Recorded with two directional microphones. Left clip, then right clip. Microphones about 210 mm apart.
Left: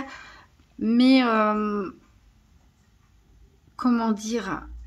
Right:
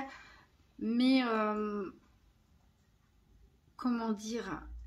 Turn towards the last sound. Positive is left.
turn(degrees=30)  # may be behind; listen again after turning